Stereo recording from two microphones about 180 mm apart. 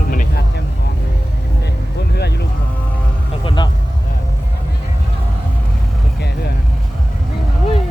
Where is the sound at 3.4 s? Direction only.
25° left (ahead or behind).